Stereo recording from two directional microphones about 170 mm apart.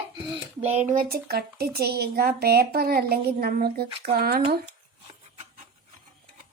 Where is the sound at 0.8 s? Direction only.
55° right (ahead or behind).